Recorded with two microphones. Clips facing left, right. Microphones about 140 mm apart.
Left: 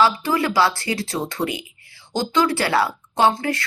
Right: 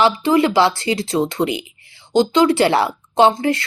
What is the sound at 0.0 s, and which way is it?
Speech, 25° right (ahead or behind).